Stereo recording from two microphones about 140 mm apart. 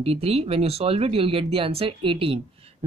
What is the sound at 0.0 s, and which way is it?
Speech, 45° right (ahead or behind).